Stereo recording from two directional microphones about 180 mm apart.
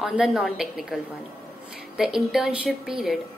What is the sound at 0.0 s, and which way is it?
A woman's voice, 5° right (ahead or behind).